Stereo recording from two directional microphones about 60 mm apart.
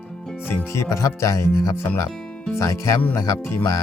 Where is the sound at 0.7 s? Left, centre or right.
Left.